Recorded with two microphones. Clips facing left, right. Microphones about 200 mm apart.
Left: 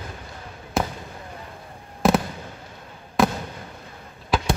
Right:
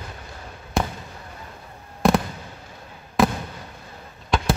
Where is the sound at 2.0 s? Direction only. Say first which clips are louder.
Even; centre (ahead or behind).